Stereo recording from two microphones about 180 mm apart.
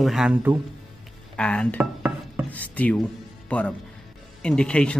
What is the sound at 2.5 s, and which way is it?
Speech, 10° left (ahead or behind).